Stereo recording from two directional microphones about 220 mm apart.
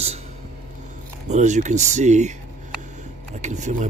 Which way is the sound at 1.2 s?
30° right (ahead or behind).